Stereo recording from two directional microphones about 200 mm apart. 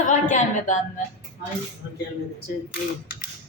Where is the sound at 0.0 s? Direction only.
40° left (ahead or behind).